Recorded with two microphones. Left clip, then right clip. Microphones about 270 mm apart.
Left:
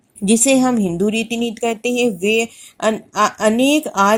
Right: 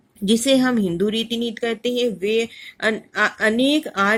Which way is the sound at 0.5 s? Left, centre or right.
Centre.